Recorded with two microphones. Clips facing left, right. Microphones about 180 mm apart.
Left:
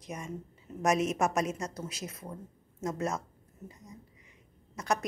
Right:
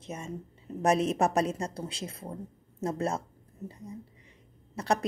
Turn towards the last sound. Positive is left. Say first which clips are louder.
# right 3 dB
turn(degrees=-30)  # may be behind; listen again after turning